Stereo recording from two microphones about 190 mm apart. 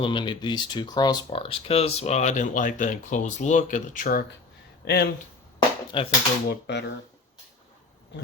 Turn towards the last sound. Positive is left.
turn(degrees=65)  # may be behind; listen again after turning